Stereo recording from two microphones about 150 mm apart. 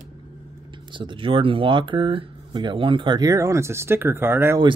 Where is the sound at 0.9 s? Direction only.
35° right (ahead or behind); by 4.5 s 15° right (ahead or behind).